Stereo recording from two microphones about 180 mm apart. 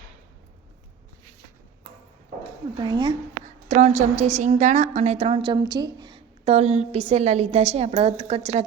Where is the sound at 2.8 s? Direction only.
25° right (ahead or behind).